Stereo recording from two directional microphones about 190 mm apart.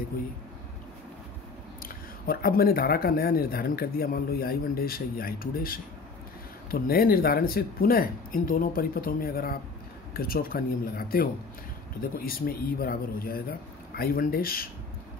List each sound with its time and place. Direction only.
1.8 s speech: 50° left (ahead or behind)